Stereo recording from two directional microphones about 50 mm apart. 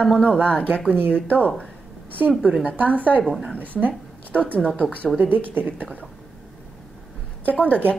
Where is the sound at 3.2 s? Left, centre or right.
Centre.